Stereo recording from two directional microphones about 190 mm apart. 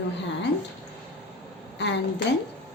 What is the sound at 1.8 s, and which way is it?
Speech, 65° left (ahead or behind).